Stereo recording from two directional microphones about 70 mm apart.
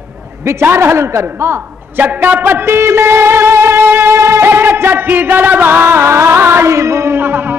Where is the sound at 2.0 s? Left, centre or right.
Right.